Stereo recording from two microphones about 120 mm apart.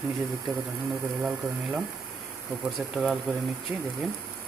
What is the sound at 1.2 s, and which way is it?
Speech, centre (ahead or behind).